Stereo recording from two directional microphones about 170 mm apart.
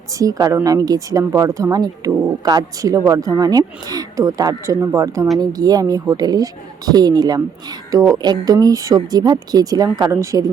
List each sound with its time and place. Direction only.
0.2 s a woman's voice: 20° right (ahead or behind)